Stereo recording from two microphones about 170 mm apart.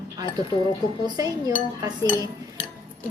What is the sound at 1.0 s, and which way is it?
Speech, 20° right (ahead or behind).